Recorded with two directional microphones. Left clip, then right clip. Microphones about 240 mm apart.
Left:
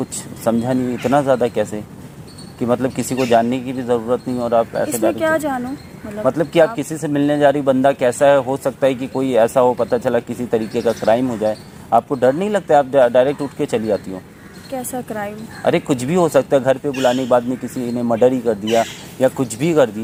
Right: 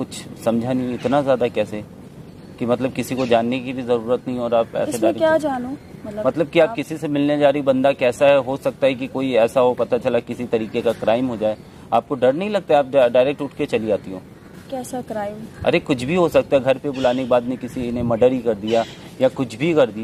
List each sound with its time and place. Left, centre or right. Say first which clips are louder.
0.0 s a woman's voice: left 2 dB; centre
6.3 s speech: left 2 dB; centre
14.7 s a woman's voice: left 2 dB; centre
15.6 s speech: left 2 dB; centre